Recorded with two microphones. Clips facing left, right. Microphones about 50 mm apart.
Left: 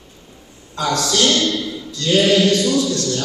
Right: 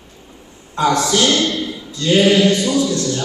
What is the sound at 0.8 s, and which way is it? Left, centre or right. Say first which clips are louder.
A man's voice: right 3 dB; right.